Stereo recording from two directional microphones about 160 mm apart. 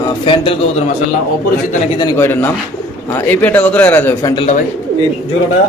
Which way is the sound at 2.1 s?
15° left (ahead or behind).